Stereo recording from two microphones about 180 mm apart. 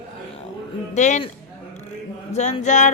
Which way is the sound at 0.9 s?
40° left (ahead or behind).